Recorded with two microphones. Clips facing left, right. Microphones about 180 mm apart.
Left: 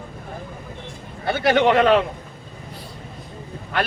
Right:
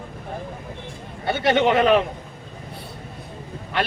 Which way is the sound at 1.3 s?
Centre (ahead or behind).